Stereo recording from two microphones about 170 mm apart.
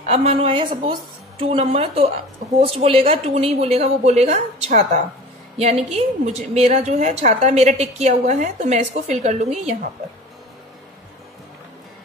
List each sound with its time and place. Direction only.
0.0 s a woman's voice: 40° right (ahead or behind)